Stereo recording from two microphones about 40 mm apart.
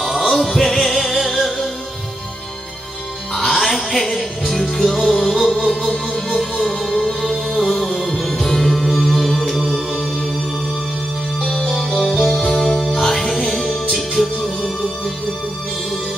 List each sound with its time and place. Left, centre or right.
0.0 s music: centre
3.3 s music: centre
6.0 s music: centre
6.8 s music: centre
11.4 s music: centre